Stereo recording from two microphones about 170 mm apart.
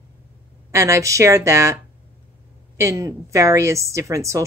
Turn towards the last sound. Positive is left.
turn(degrees=-15)  # may be behind; listen again after turning